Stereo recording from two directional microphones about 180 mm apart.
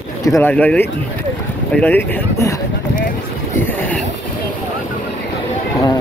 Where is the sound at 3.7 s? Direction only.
10° left (ahead or behind).